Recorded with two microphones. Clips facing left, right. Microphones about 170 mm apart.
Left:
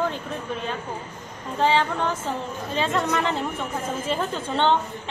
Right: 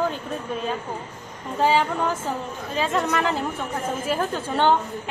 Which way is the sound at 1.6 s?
5° right (ahead or behind).